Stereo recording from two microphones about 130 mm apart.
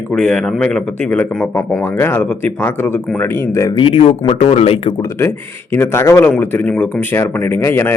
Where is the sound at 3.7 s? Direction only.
45° left (ahead or behind).